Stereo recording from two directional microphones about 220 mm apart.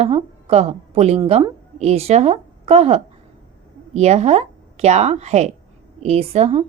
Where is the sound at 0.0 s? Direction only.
30° right (ahead or behind).